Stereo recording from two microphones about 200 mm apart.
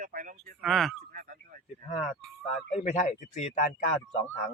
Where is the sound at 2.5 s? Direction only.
35° left (ahead or behind).